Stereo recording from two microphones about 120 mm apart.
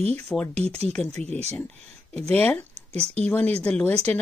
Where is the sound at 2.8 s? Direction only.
60° right (ahead or behind).